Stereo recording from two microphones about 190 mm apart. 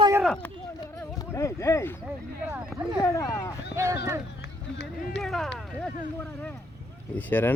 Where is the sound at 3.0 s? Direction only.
20° left (ahead or behind).